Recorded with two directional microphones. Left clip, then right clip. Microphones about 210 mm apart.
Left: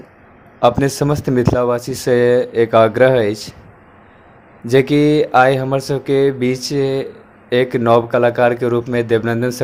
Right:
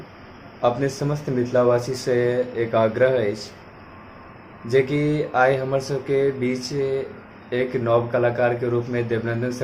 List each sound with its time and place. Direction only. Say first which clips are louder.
0.6 s speech: left 8 dB; 45° left (ahead or behind)
4.6 s speech: left 7 dB; 45° left (ahead or behind)